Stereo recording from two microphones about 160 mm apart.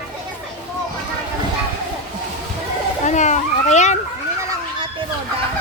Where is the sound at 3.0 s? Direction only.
50° left (ahead or behind).